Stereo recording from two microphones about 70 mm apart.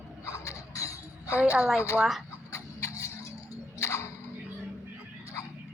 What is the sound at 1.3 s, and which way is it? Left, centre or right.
Speech, right.